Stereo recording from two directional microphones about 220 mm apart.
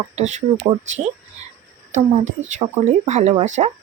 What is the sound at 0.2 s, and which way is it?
Speech, 30° right (ahead or behind).